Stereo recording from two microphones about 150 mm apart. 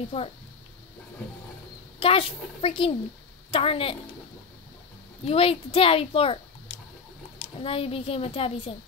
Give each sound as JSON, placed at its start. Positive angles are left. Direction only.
{"t": 0.1, "sound": "a child's voice", "side_deg": 40}
{"t": 2.0, "sound": "a child's voice", "side_deg": 40}
{"t": 5.2, "sound": "a child's voice", "side_deg": 40}